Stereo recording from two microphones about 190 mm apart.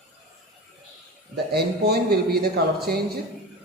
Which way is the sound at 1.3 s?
55° right (ahead or behind).